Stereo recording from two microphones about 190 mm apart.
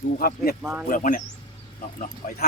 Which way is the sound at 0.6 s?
5° right (ahead or behind).